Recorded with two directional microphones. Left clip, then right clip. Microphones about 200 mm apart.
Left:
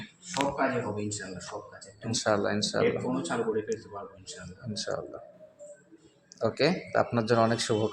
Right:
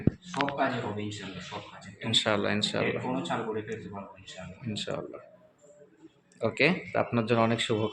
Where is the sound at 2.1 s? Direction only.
20° right (ahead or behind).